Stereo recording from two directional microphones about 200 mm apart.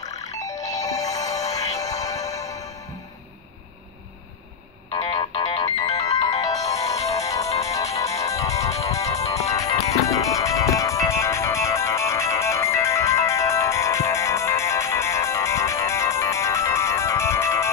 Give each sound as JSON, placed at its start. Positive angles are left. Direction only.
{"t": 0.0, "sound": "music", "side_deg": 15}
{"t": 5.4, "sound": "ringtone", "side_deg": 15}
{"t": 7.6, "sound": "music", "side_deg": 15}